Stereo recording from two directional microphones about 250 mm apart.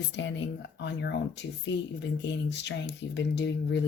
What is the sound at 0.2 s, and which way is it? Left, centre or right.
Speech, left.